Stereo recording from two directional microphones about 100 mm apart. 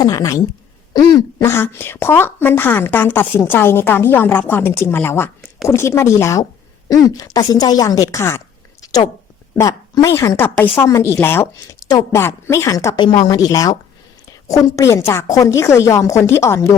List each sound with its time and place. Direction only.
0.0 s a woman's voice: 35° left (ahead or behind)
8.8 s a sound: 40° left (ahead or behind)
9.6 s a woman's voice: 35° left (ahead or behind)
13.0 s a woman's voice: 45° left (ahead or behind); by 16.7 s 30° left (ahead or behind)